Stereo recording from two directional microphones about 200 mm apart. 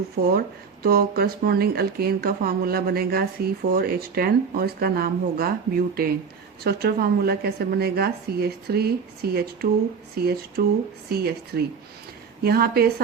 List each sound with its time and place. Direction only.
0.3 s speech: 50° right (ahead or behind)